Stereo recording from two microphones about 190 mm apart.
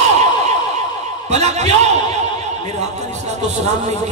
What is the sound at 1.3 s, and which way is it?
Speech, 35° right (ahead or behind).